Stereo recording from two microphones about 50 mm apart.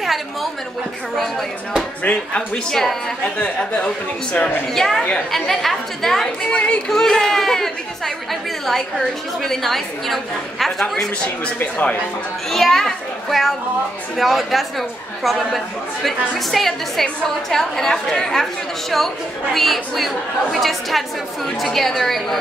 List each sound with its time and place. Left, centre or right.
0.0 s a woman's voice: centre
2.0 s speech: left
2.7 s a woman's voice: centre
3.4 s speech: left
4.7 s a woman's voice: centre
11.6 s a man's voice: left
12.4 s a woman's voice: centre